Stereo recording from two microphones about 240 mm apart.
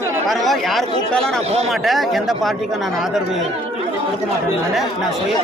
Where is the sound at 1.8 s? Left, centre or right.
Centre.